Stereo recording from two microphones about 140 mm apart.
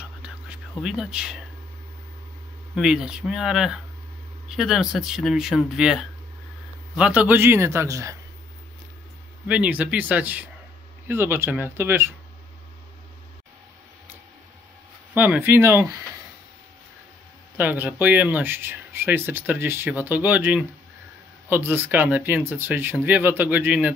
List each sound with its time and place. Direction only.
0.0 s a sound: 5° right (ahead or behind)
0.7 s speech: 5° right (ahead or behind)
2.7 s speech: 5° right (ahead or behind); by 8.2 s 20° right (ahead or behind)
9.5 s speech: 10° right (ahead or behind)
15.1 s speech: 10° right (ahead or behind)
17.6 s speech: 10° right (ahead or behind)